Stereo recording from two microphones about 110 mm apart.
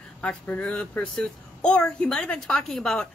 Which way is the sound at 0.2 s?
10° left (ahead or behind).